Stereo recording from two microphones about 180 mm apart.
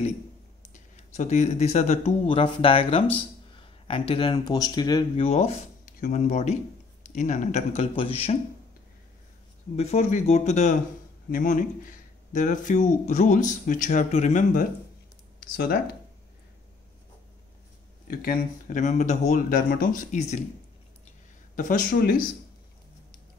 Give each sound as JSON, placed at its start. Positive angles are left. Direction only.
{"t": 0.7, "sound": "speech", "side_deg": 40}
{"t": 9.8, "sound": "speech", "side_deg": 40}
{"t": 15.4, "sound": "speech", "side_deg": 60}
{"t": 18.0, "sound": "speech", "side_deg": 55}
{"t": 21.5, "sound": "speech", "side_deg": 50}